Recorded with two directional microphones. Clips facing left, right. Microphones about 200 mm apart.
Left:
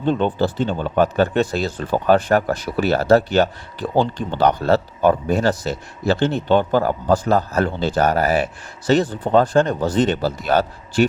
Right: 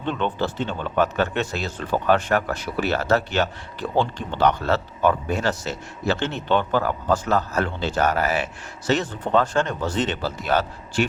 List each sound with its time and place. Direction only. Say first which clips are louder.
0.0 s speech: left 6 dB; 40° left (ahead or behind)